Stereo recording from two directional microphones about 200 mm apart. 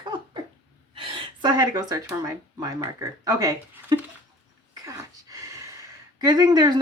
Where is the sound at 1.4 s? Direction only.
20° right (ahead or behind).